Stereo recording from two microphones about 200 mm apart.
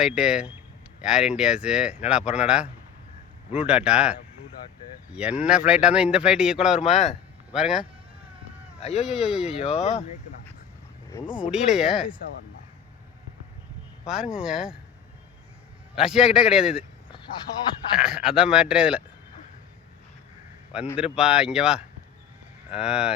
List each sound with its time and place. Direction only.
0.0 s speech: 5° right (ahead or behind)
6.8 s speech: 35° left (ahead or behind)
7.5 s speech: 5° right (ahead or behind)
8.8 s speech: 30° left (ahead or behind)
9.0 s speech: 5° right (ahead or behind)
9.6 s speech: 30° left (ahead or behind)
11.3 s speech: 5° right (ahead or behind)
14.1 s speech: 5° right (ahead or behind)
16.0 s speech: 5° right (ahead or behind)
17.9 s speech: 5° right (ahead or behind)
20.9 s speech: 5° right (ahead or behind)